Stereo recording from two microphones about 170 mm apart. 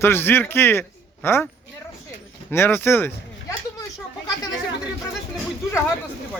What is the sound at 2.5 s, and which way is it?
Speech, 15° left (ahead or behind).